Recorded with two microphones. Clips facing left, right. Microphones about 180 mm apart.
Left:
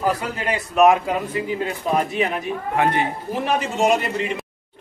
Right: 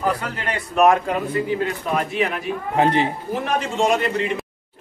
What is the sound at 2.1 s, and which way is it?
Speech, 20° left (ahead or behind).